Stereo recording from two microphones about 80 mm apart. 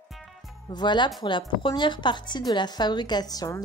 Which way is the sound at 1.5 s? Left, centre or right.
Left.